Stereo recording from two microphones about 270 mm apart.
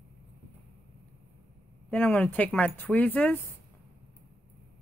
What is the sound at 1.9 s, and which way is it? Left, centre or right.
Speech, centre.